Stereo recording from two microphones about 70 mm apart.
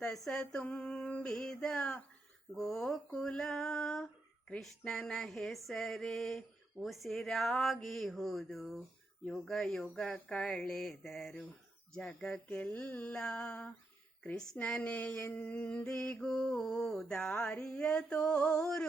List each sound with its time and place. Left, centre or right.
0.0 s mantra: centre
2.6 s a sound: centre
3.2 s speech: centre
4.8 s mantra: centre
6.8 s a sound: centre
11.9 s mantra: centre
12.5 s mantra: left
13.1 s mantra: centre
17.3 s mantra: left